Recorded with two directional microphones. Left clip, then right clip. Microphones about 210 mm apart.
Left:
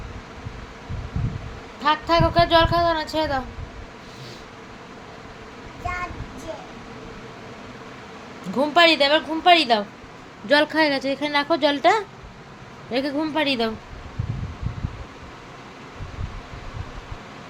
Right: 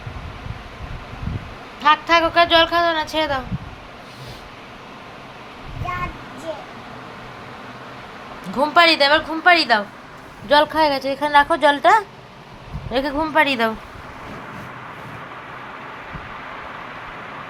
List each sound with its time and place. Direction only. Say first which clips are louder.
1.8 s speech: right 4 dB; 5° left (ahead or behind)
8.5 s a woman's voice: right 2 dB; 10° left (ahead or behind)
10.5 s a woman's voice: right 3 dB; 30° left (ahead or behind)
12.9 s a woman's voice: right 4 dB; 15° left (ahead or behind)